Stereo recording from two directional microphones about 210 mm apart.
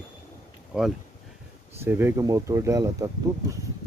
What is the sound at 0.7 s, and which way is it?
Speech, 5° right (ahead or behind).